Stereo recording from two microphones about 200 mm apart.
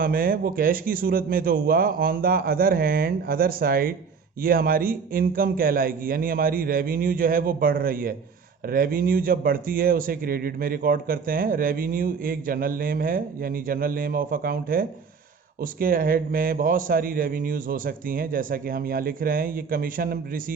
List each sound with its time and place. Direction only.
0.0 s a man's voice: 45° right (ahead or behind)